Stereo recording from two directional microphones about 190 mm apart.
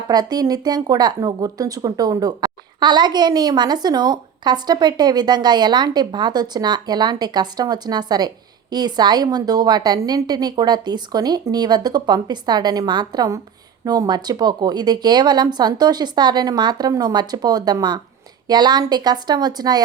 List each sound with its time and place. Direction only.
0.1 s speech: 20° right (ahead or behind)